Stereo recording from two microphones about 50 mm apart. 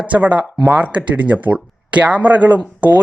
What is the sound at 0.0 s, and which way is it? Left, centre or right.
Speech, right.